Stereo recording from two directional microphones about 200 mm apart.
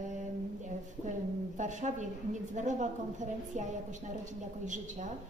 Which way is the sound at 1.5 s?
35° right (ahead or behind).